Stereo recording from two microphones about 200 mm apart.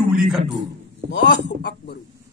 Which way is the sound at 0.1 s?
Centre (ahead or behind).